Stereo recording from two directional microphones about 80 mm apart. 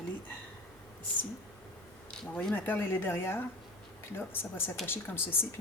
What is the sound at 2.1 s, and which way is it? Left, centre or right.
Speech, centre.